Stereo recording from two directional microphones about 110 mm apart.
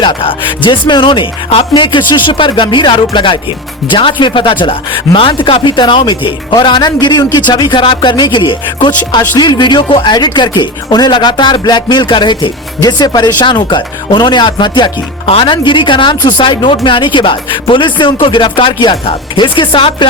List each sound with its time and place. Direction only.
0.0 s speech: 50° left (ahead or behind)